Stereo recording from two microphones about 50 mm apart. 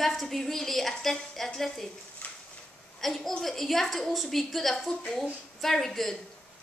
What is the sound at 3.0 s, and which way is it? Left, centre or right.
A woman's voice, centre.